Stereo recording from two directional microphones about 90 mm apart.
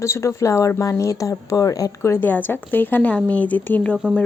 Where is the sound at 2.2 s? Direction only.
20° left (ahead or behind).